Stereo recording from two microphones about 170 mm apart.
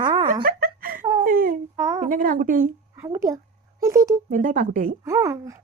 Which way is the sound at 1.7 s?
20° right (ahead or behind).